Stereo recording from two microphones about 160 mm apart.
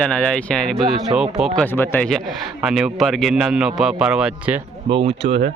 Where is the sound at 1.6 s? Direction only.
15° left (ahead or behind).